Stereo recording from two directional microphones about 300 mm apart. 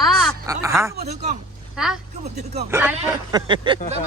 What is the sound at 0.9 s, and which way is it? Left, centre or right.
Speech, right.